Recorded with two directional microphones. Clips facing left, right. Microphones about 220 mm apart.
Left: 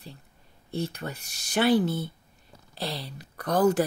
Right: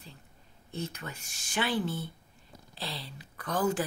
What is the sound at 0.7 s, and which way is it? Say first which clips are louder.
A woman's voice: left 6 dB; 35° left (ahead or behind).